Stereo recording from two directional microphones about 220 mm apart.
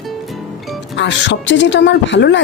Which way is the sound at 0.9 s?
55° left (ahead or behind).